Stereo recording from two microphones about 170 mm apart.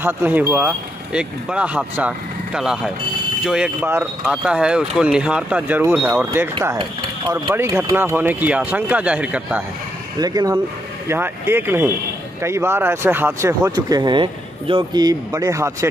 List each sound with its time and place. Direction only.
0.0 s speech: 10° right (ahead or behind)
6.8 s speech: 25° right (ahead or behind)
7.5 s speech: 15° right (ahead or behind)
10.2 s speech: 20° right (ahead or behind)